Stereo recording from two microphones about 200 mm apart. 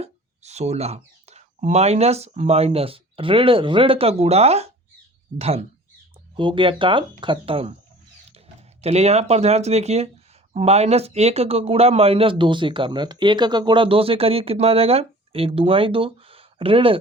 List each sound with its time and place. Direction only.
0.0 s speech: 35° right (ahead or behind)
8.8 s speech: 30° right (ahead or behind)